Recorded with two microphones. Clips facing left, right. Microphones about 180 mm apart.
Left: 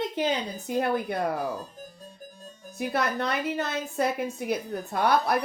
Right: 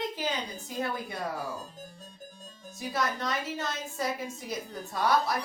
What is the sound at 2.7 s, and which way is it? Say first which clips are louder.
Speech: left 4 dB; 60° left (ahead or behind).